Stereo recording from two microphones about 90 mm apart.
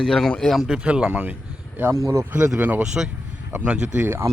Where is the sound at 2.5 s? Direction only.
20° right (ahead or behind).